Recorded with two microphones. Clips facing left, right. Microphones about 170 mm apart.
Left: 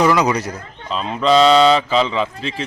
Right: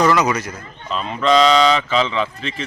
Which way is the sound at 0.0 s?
10° left (ahead or behind).